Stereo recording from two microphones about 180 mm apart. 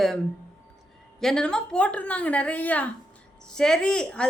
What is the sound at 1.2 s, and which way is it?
A woman's voice, 5° left (ahead or behind).